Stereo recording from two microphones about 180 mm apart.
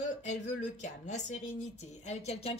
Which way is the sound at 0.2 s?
40° left (ahead or behind).